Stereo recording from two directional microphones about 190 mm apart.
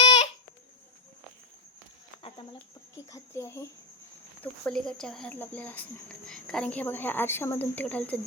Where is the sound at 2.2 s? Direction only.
30° left (ahead or behind).